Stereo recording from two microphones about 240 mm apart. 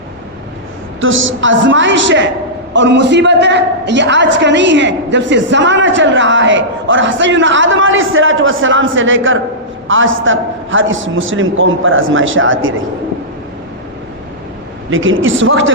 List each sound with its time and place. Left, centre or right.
1.0 s a man's voice: right
14.8 s a man's voice: right